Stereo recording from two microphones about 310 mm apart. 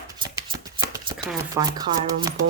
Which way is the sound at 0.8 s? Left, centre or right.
Centre.